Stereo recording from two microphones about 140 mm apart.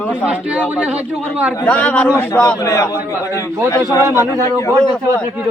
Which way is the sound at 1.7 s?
10° left (ahead or behind).